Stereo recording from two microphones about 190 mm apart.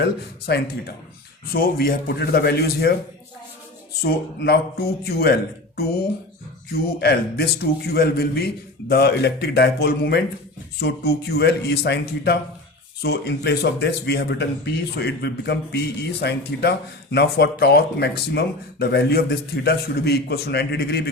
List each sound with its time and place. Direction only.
0.0 s speech: 60° left (ahead or behind)
4.0 s speech: 60° left (ahead or behind)
7.0 s speech: 55° left (ahead or behind)